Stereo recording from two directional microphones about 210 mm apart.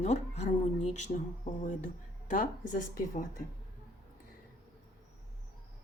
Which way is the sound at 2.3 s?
40° left (ahead or behind).